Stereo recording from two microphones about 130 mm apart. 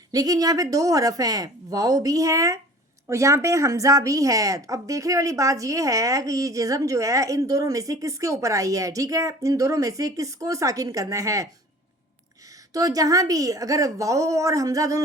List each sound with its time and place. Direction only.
0.1 s a woman's voice: 30° right (ahead or behind)
12.7 s a woman's voice: 25° right (ahead or behind)